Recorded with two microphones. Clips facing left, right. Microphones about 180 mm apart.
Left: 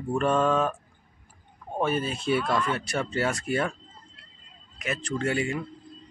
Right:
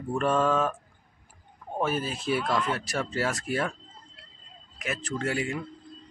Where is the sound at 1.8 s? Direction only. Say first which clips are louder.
Left 2 dB; 5° right (ahead or behind).